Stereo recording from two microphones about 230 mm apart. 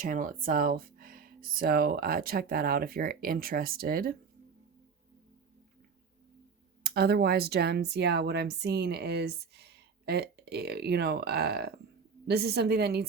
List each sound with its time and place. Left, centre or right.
0.0 s speech: right
6.8 s speech: right